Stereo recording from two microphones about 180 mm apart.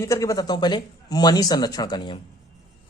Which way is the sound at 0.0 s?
15° left (ahead or behind).